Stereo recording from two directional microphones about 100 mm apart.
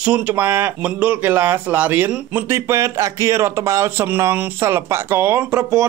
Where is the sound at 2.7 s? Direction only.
30° right (ahead or behind).